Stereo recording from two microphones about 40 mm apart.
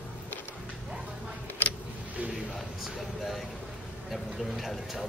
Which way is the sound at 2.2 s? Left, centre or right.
Right.